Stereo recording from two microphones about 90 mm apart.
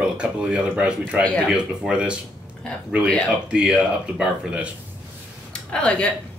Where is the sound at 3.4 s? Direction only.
10° right (ahead or behind).